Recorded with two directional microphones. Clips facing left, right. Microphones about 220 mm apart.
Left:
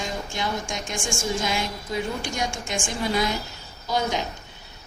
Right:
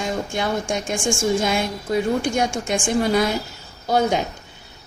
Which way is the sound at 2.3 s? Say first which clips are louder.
Right 7 dB; 55° right (ahead or behind).